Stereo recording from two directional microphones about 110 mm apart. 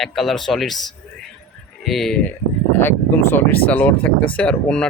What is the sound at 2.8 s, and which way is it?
Speech, 20° left (ahead or behind).